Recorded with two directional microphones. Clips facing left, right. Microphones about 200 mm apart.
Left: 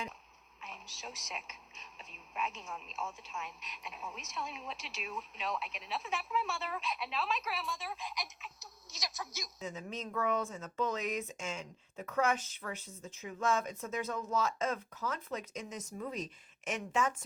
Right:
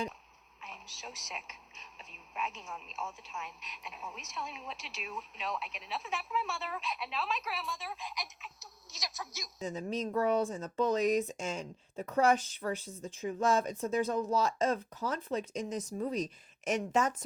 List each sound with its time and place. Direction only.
0.6 s a woman's voice: centre (ahead or behind)
9.6 s speech: 35° right (ahead or behind)